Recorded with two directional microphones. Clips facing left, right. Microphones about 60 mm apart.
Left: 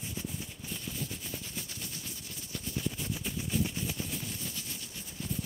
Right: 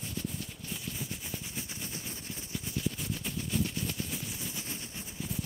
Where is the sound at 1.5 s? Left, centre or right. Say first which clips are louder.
Right 2 dB; right.